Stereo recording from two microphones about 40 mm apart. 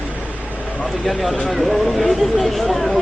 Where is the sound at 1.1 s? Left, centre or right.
Centre.